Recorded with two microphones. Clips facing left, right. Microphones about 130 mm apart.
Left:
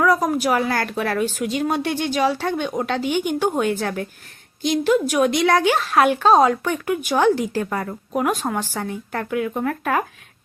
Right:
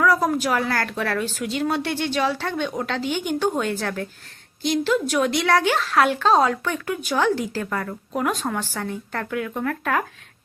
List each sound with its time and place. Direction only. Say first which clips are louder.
0.0 s a woman's voice: left 2 dB; 20° left (ahead or behind)